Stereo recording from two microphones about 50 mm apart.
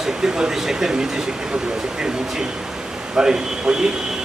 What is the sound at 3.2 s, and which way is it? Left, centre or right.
Speech, centre.